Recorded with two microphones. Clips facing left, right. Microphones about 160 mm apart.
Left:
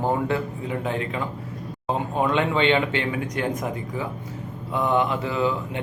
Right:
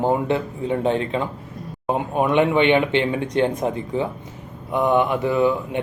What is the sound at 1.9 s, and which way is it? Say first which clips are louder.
Speech: right 4 dB; 15° right (ahead or behind).